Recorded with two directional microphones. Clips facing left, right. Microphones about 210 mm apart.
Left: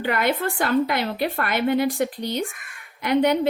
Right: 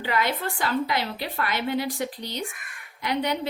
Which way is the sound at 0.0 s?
55° left (ahead or behind).